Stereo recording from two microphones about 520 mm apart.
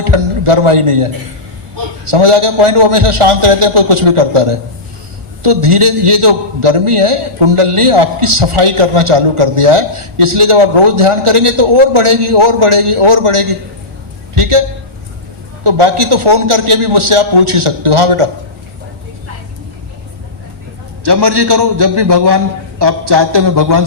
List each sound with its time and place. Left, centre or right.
0.0 s a man's voice: right
15.6 s a man's voice: right
21.0 s a man's voice: right